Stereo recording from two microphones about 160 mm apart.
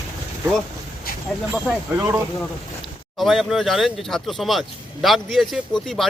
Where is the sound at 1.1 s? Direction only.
65° left (ahead or behind).